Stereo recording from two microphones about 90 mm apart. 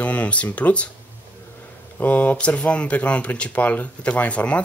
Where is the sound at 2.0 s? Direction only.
15° left (ahead or behind).